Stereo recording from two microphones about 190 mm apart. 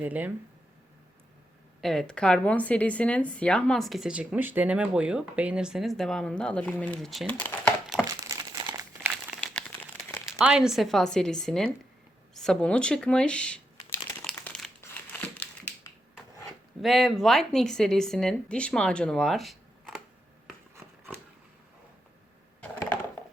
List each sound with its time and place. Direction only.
0.0 s speech: 10° right (ahead or behind)
1.8 s a woman's voice: centre (ahead or behind)
8.2 s crumpling: 15° right (ahead or behind)
9.3 s crumpling: 5° left (ahead or behind)
10.4 s a woman's voice: 5° right (ahead or behind)
14.3 s crumpling: 5° left (ahead or behind)
16.8 s a woman's voice: centre (ahead or behind)